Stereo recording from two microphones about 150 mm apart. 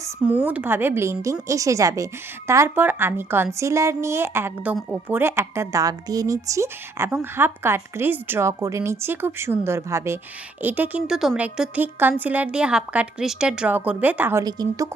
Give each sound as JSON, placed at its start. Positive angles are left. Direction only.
{"t": 0.2, "sound": "a woman's voice", "side_deg": -10}
{"t": 14.4, "sound": "a woman's voice", "side_deg": -25}